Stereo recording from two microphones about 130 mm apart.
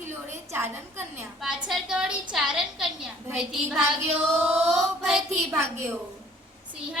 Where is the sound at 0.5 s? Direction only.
20° right (ahead or behind).